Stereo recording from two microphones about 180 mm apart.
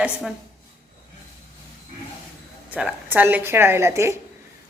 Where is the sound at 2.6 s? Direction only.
5° right (ahead or behind).